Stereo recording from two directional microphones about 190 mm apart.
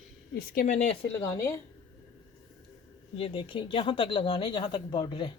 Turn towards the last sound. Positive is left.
turn(degrees=25)  # may be behind; listen again after turning